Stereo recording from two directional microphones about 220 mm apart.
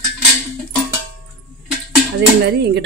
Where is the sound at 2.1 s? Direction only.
50° right (ahead or behind).